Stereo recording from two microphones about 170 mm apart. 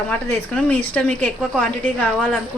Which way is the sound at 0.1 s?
5° left (ahead or behind).